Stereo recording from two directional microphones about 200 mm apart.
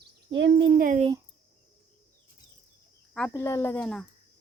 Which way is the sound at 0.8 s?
40° right (ahead or behind).